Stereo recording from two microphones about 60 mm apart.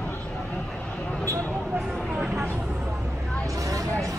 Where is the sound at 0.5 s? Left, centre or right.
Centre.